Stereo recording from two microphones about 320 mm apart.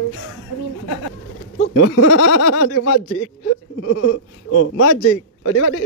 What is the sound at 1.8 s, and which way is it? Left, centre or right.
Speech, left.